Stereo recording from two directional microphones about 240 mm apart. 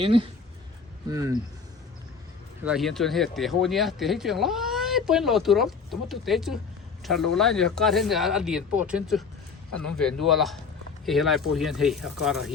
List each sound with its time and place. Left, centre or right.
0.0 s speech: right
2.6 s speech: centre